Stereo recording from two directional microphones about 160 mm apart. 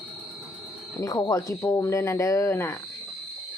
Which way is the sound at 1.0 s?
25° left (ahead or behind).